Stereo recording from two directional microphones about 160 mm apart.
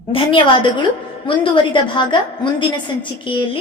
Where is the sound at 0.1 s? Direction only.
30° left (ahead or behind).